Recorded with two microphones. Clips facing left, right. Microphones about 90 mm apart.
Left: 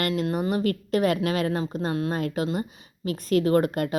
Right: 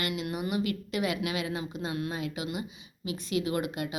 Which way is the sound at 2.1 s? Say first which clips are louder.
Left 8 dB; 50° left (ahead or behind).